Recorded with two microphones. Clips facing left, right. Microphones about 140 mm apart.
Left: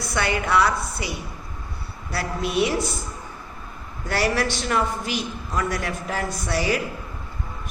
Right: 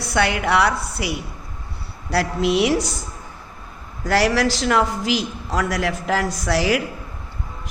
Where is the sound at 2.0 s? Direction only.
85° right.